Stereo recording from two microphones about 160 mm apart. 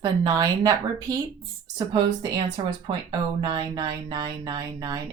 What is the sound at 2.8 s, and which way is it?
Speech, 30° right (ahead or behind).